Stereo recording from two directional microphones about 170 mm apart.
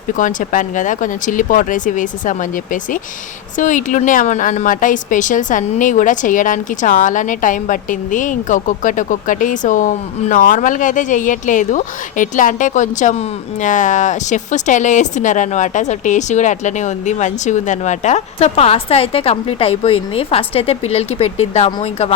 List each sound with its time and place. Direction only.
0.2 s a woman's voice: 50° left (ahead or behind)
3.6 s a woman's voice: 50° left (ahead or behind)